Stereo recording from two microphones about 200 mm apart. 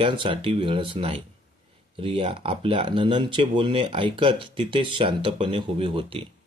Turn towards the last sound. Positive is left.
turn(degrees=-25)  # may be behind; listen again after turning